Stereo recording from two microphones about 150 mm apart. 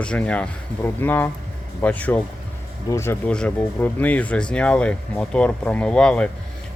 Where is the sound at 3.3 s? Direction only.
5° left (ahead or behind).